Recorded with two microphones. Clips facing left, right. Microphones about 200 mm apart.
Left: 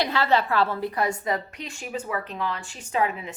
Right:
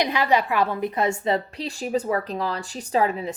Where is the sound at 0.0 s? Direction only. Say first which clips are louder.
Right 1 dB; 15° right (ahead or behind).